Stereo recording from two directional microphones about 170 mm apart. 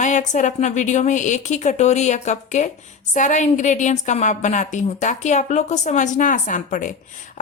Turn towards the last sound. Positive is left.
turn(degrees=50)  # may be behind; listen again after turning